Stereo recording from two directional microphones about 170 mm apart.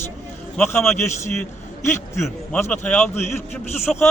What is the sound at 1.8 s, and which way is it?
A man's voice, 15° left (ahead or behind).